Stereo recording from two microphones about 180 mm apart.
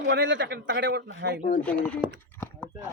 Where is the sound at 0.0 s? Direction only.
70° right (ahead or behind).